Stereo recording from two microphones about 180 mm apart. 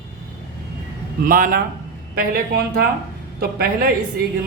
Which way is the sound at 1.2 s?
50° right (ahead or behind).